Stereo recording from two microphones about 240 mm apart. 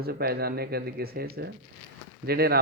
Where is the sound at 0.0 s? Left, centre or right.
Right.